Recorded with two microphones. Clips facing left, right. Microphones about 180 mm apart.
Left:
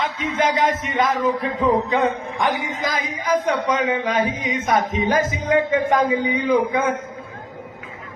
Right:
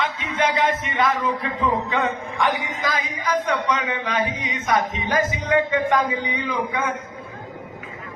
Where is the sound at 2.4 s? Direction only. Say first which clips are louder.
Left 1 dB; 45° left (ahead or behind).